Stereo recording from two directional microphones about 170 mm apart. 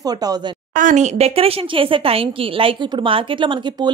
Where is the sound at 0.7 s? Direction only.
50° right (ahead or behind).